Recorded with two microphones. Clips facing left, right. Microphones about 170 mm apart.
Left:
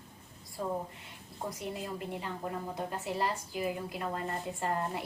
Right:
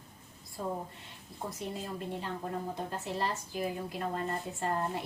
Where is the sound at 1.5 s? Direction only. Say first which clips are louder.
Left 1 dB; 15° left (ahead or behind).